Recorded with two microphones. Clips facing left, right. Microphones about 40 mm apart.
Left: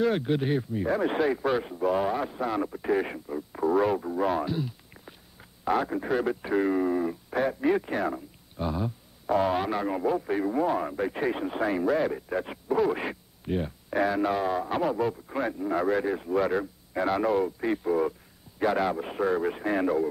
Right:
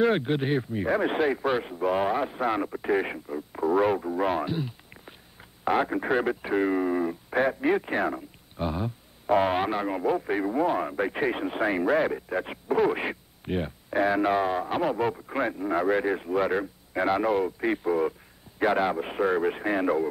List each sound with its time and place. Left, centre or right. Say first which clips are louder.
0.0 s a man's voice: right 2 dB; right
3.3 s a man's voice: even; centre; by 12.1 s right
12.1 s a man's voice: right 1 dB; centre
15.0 s a man's voice: right 1 dB; right